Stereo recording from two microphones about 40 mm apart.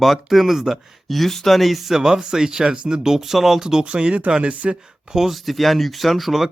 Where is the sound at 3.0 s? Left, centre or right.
Centre.